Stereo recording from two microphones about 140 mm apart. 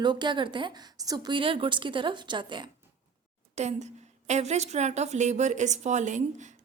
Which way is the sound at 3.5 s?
55° right (ahead or behind).